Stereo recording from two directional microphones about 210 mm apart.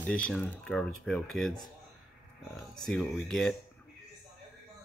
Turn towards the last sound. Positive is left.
turn(degrees=0)  # may be behind; listen again after turning